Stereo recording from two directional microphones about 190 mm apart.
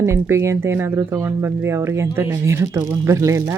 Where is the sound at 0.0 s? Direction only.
15° right (ahead or behind).